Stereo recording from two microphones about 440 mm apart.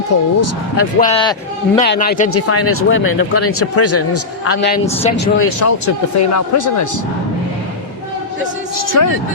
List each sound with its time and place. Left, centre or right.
0.1 s speech: left
0.9 s a man's voice: centre
2.3 s speech: left
4.7 s speech: centre
5.5 s speech: left
8.9 s speech: left